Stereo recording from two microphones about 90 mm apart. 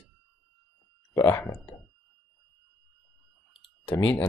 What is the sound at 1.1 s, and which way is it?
Speech, 30° left (ahead or behind).